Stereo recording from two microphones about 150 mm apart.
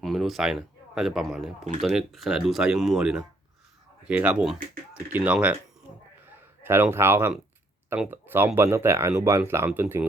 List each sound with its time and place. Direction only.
0.0 s speech: centre (ahead or behind)
6.2 s a sound: 15° right (ahead or behind)
7.9 s speech: 15° right (ahead or behind)